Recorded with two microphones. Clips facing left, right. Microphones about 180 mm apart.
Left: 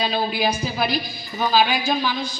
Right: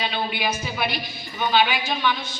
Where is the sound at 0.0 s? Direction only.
35° left (ahead or behind).